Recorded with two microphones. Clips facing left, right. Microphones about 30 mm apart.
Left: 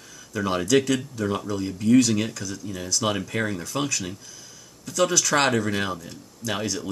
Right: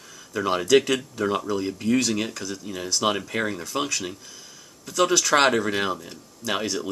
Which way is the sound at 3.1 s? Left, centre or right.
Centre.